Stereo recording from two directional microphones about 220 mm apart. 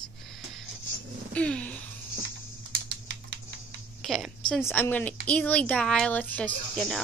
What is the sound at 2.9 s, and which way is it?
Typing, 55° right (ahead or behind).